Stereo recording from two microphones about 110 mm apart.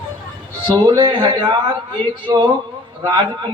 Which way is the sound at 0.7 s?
45° right (ahead or behind).